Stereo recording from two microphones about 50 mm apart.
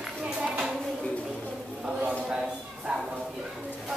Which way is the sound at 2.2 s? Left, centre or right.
Centre.